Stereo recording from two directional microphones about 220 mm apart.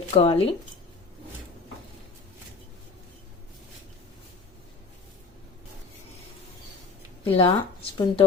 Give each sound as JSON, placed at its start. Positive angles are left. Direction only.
{"t": 0.1, "sound": "speech", "side_deg": 25}
{"t": 7.3, "sound": "speech", "side_deg": 25}